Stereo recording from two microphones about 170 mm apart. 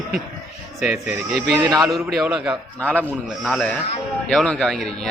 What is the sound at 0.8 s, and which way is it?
Speech, centre (ahead or behind).